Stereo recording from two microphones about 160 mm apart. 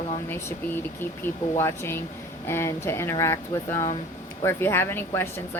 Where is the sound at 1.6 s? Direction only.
15° left (ahead or behind).